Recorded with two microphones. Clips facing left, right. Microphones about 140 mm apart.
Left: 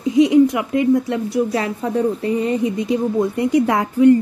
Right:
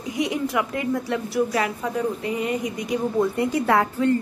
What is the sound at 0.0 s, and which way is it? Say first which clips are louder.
A woman's voice: left 13 dB; 25° left (ahead or behind).